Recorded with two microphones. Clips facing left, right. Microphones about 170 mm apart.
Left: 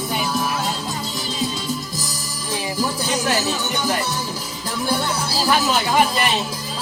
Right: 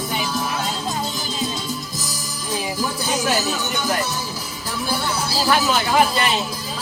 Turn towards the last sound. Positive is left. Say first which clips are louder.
# even
turn(degrees=0)  # may be behind; listen again after turning